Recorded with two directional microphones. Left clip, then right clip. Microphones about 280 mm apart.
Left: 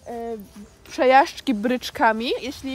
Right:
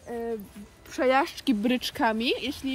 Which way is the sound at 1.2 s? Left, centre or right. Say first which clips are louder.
Left 4 dB; centre.